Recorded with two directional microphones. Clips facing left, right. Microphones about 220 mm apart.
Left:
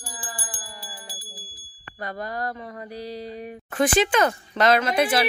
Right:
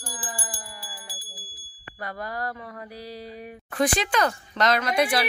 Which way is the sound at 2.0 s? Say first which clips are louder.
Left 2 dB; 20° left (ahead or behind).